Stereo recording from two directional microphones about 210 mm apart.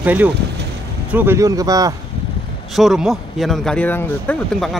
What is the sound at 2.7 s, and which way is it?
Speech, centre (ahead or behind).